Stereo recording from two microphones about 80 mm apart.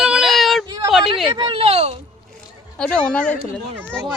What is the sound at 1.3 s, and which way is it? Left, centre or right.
Speech, right.